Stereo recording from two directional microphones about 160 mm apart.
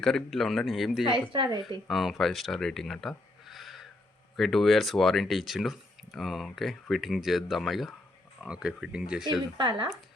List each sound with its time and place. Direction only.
0.0 s speech: centre (ahead or behind)
1.3 s a woman's voice: 30° right (ahead or behind)
1.9 s speech: centre (ahead or behind)
9.6 s speech: 30° right (ahead or behind)